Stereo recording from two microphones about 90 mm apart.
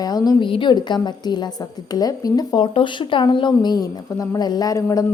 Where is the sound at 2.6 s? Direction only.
65° left (ahead or behind); by 5.0 s 40° left (ahead or behind).